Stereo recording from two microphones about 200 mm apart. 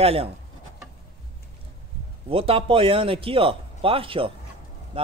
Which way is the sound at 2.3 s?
30° right (ahead or behind).